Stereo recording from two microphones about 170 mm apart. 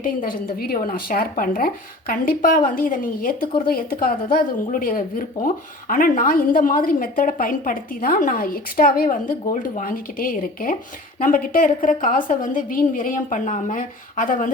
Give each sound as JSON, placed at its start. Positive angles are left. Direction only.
{"t": 0.0, "sound": "a woman's voice", "side_deg": 55}